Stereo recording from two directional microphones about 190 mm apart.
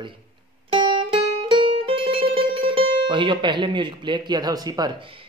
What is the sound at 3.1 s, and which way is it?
Speech, 25° right (ahead or behind).